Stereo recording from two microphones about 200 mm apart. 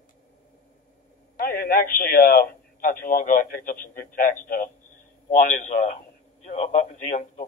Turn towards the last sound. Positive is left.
turn(degrees=40)  # may be behind; listen again after turning